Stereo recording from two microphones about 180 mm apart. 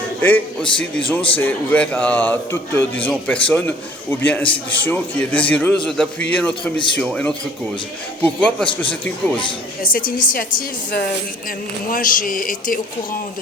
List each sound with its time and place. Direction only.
0.2 s a man's voice: 10° left (ahead or behind)
9.8 s a woman's voice: 50° left (ahead or behind)